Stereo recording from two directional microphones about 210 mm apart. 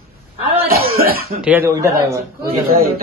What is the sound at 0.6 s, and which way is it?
Cough, 45° right (ahead or behind).